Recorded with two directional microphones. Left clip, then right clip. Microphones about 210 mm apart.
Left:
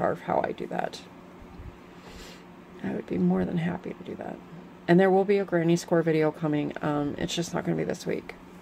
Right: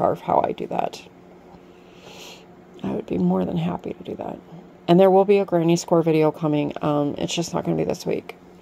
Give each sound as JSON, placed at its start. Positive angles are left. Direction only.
{"t": 0.0, "sound": "speech", "side_deg": -20}
{"t": 2.8, "sound": "speech", "side_deg": -20}